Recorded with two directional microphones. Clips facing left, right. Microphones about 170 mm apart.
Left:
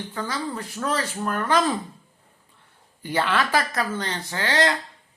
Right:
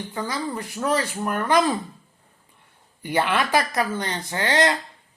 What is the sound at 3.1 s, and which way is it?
Speech, 15° right (ahead or behind).